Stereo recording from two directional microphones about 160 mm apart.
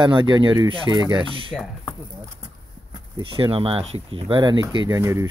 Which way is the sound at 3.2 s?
35° right (ahead or behind).